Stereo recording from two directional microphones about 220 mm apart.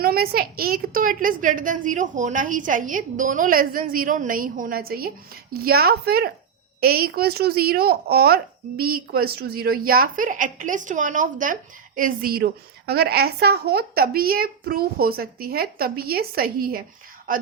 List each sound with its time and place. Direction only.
0.0 s a woman's voice: 45° right (ahead or behind)